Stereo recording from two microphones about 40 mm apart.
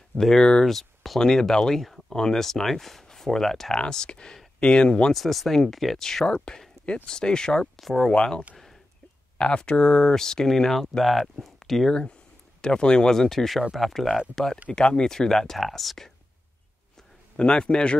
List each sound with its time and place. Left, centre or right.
0.2 s speech: centre
0.7 s speech: centre
3.8 s speech: left
5.1 s speech: centre
6.2 s speech: left
7.8 s speech: centre
8.1 s speech: left; by 11.9 s centre
11.9 s speech: left
13.1 s speech: centre
17.4 s speech: left